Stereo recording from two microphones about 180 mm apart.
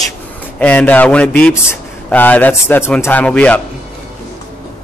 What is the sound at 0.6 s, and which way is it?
Speech, 5° left (ahead or behind).